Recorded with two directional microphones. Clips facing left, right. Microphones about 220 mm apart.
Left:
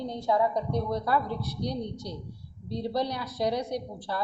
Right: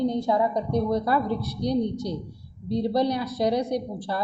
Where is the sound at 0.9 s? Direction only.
15° right (ahead or behind).